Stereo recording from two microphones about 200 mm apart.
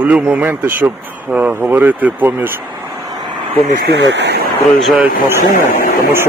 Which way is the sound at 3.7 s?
55° right (ahead or behind).